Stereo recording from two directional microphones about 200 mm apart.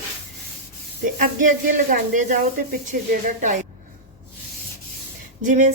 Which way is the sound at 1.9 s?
40° right (ahead or behind).